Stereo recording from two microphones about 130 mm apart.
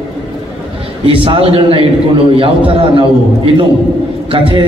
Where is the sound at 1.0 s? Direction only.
45° right (ahead or behind).